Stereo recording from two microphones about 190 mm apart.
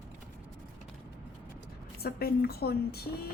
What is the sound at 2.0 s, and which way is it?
Speech, 55° left (ahead or behind).